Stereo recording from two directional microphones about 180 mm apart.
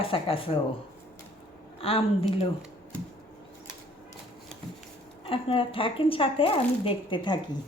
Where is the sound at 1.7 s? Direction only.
30° left (ahead or behind).